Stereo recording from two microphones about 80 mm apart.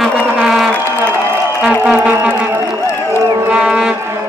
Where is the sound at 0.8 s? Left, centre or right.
Right.